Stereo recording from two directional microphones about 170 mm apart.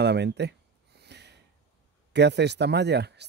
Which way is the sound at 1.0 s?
85° right.